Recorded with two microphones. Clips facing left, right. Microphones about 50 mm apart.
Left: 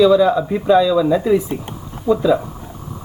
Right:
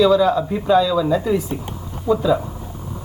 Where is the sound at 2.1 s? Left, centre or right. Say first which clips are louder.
Left 2 dB; left.